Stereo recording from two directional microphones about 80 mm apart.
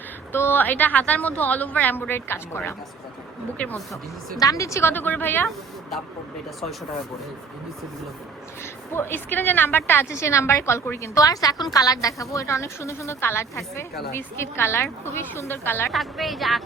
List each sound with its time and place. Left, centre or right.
0.3 s a woman's voice: left
3.6 s speech: centre
4.4 s a woman's voice: left
8.9 s a woman's voice: left
15.9 s speech: centre